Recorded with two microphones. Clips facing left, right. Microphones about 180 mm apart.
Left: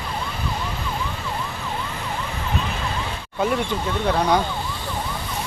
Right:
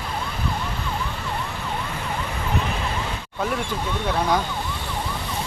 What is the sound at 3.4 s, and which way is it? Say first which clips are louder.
Speech: left 4 dB; centre (ahead or behind).